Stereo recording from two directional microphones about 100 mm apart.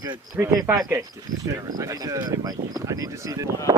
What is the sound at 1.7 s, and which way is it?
Speech, 30° right (ahead or behind).